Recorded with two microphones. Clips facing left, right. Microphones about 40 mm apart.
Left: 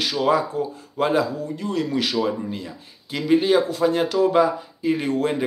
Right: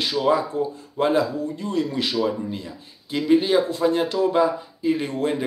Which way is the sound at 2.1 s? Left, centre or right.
Left.